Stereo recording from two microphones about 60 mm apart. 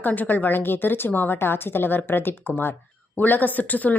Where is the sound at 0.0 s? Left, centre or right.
Left.